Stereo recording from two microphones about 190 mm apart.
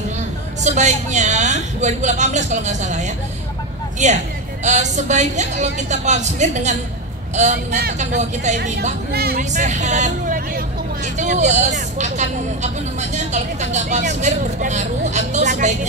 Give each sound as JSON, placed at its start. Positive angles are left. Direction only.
{"t": 0.7, "sound": "speech", "side_deg": -40}
{"t": 4.6, "sound": "speech", "side_deg": -40}
{"t": 9.1, "sound": "speech", "side_deg": -55}
{"t": 9.4, "sound": "speech", "side_deg": -40}